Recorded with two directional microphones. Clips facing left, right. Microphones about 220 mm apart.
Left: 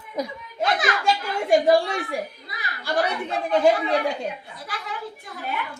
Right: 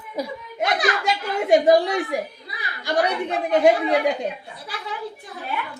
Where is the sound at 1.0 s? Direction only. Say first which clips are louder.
Right 1 dB; 20° right (ahead or behind).